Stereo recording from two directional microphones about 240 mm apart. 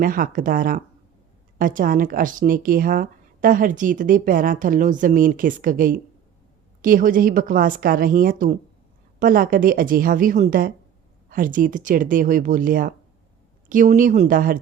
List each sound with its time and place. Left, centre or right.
0.0 s speech: right